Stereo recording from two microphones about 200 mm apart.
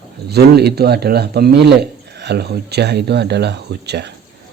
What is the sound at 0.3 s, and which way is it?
A man's voice, 55° right (ahead or behind).